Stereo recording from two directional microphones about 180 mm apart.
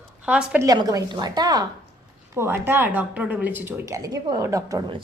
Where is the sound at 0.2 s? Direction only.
5° right (ahead or behind).